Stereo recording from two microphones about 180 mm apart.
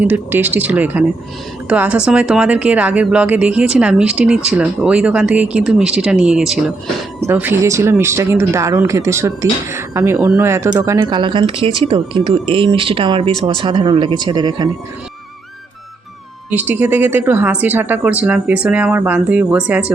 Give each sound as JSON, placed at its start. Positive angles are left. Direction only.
{"t": 0.0, "sound": "speech", "side_deg": -10}
{"t": 16.5, "sound": "speech", "side_deg": -10}